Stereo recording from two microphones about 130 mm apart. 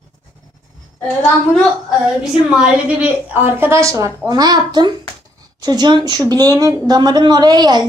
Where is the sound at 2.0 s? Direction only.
5° right (ahead or behind).